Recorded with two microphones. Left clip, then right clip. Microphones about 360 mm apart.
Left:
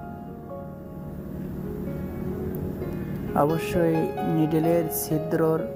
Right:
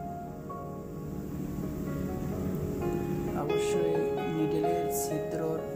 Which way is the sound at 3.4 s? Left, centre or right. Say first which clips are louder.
Left 6 dB; centre.